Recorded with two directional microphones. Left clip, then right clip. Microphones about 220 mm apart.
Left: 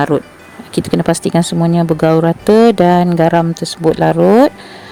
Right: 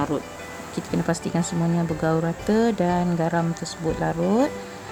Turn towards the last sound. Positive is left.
turn(degrees=40)  # may be behind; listen again after turning